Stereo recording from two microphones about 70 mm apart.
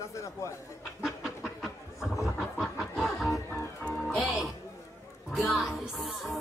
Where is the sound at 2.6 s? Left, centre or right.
Centre.